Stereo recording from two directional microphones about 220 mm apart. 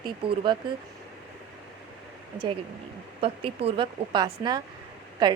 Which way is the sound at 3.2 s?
25° right (ahead or behind).